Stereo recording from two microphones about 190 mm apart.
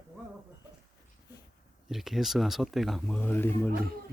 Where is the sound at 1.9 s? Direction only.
Centre (ahead or behind).